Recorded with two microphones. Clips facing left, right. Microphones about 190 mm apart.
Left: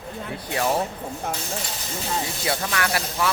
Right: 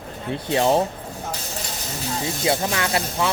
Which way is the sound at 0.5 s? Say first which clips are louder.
Right 5 dB; 25° right (ahead or behind).